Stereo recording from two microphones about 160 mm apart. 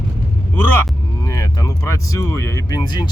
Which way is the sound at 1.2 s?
20° left (ahead or behind).